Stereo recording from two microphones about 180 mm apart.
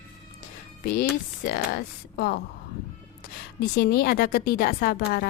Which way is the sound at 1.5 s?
60° left (ahead or behind).